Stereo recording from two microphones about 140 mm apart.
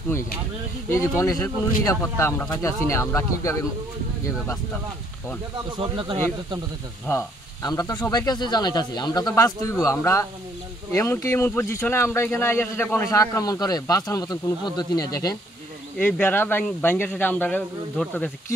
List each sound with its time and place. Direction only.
0.8 s speech: 20° left (ahead or behind)
5.8 s speech: 40° right (ahead or behind)
7.1 s speech: 25° left (ahead or behind)
16.0 s speech: 15° left (ahead or behind)